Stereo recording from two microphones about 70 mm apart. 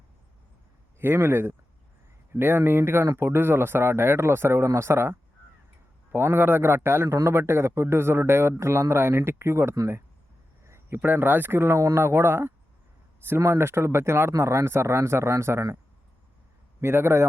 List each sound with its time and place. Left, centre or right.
0.9 s a man's voice: right
6.1 s a man's voice: right
16.8 s a man's voice: right